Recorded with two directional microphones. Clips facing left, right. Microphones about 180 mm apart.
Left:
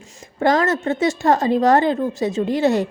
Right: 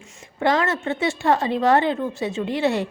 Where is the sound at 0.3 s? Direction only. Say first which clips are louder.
Left 3 dB; 40° left (ahead or behind).